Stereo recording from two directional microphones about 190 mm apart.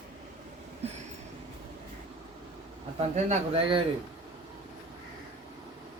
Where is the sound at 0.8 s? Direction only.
35° right (ahead or behind).